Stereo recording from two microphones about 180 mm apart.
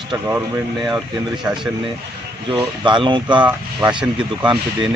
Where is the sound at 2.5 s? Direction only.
25° right (ahead or behind).